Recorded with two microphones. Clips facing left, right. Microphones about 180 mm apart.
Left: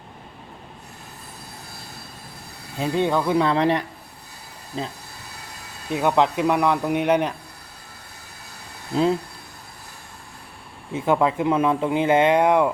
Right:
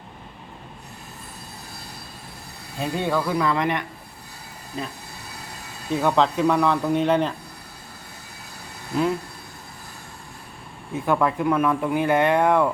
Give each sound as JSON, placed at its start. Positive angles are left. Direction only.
{"t": 2.7, "sound": "speech", "side_deg": 20}
{"t": 5.9, "sound": "a man's voice", "side_deg": 15}
{"t": 8.9, "sound": "speech", "side_deg": 25}
{"t": 10.9, "sound": "speech", "side_deg": 20}